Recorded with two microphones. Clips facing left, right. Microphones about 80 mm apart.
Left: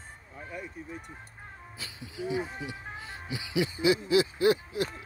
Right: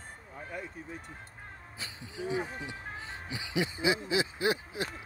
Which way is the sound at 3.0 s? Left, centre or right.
Centre.